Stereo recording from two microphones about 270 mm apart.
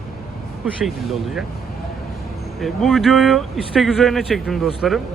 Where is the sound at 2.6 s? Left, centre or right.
Centre.